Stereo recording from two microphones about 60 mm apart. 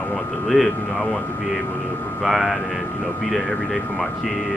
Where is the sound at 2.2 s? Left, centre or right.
Centre.